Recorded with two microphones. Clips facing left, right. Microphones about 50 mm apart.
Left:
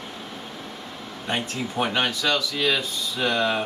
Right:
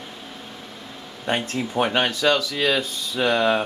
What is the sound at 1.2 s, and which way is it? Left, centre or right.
Speech, right.